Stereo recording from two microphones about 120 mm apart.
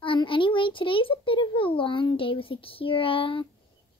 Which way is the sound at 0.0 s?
45° left (ahead or behind).